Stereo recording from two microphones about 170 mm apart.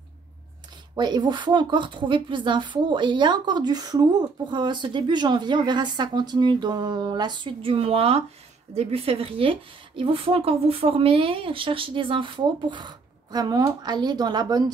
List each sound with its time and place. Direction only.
0.9 s a woman's voice: 25° right (ahead or behind)